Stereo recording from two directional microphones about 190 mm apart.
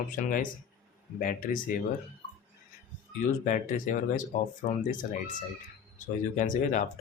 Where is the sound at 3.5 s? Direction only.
45° left (ahead or behind).